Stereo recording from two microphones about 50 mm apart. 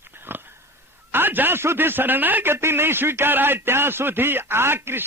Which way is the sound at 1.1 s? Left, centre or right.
Right.